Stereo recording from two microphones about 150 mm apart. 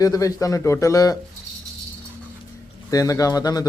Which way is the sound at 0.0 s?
25° left (ahead or behind).